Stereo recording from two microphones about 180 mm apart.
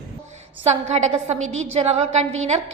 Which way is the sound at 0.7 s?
40° right (ahead or behind).